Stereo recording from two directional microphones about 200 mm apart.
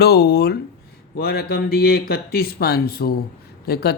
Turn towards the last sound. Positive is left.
turn(degrees=55)  # may be behind; listen again after turning